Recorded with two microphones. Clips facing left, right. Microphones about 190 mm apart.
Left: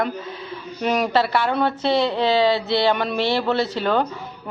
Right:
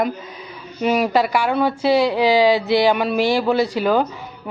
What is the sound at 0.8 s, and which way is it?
Speech, 5° right (ahead or behind).